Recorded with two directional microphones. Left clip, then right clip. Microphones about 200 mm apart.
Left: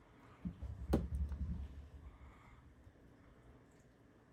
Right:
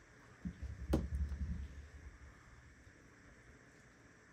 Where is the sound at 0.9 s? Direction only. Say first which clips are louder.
Even; centre (ahead or behind).